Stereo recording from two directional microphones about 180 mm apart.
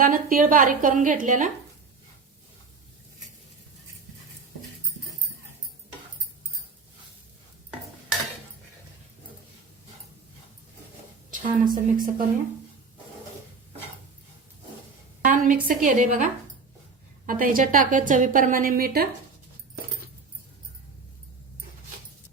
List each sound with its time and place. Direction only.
0.0 s a woman's voice: 50° right (ahead or behind)
11.3 s a woman's voice: 50° right (ahead or behind)
15.2 s a woman's voice: 45° right (ahead or behind)
17.2 s a woman's voice: 50° right (ahead or behind)